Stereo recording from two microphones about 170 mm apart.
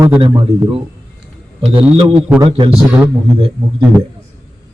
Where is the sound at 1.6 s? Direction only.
30° right (ahead or behind).